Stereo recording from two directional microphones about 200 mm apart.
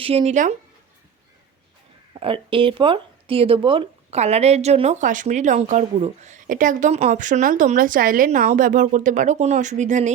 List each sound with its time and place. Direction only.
0.0 s speech: 30° right (ahead or behind)
2.1 s speech: 25° right (ahead or behind)